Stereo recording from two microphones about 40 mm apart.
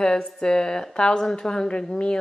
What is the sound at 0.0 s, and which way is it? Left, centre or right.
A woman's voice, centre.